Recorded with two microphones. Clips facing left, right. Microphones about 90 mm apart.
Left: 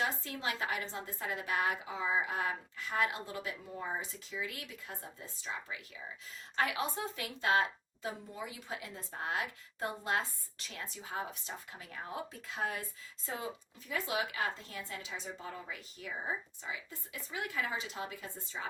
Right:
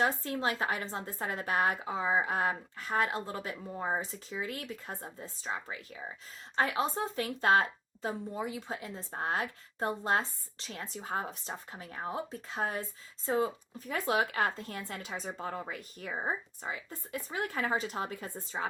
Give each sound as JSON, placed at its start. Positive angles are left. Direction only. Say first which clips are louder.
{"t": 0.0, "sound": "a woman's voice", "louder": "right 6 dB", "side_deg": -40}